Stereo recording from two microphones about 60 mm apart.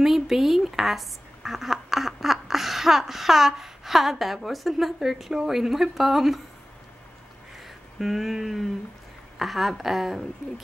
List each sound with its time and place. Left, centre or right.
0.0 s speech: centre
7.6 s a sound: centre
9.4 s a woman's voice: centre